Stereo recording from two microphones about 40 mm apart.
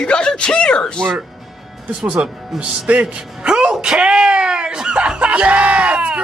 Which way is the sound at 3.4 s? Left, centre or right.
Centre.